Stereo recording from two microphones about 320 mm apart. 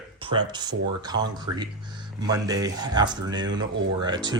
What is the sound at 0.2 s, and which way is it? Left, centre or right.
Speech, centre.